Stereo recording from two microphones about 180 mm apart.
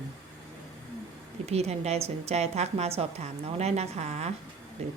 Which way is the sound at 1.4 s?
35° right (ahead or behind).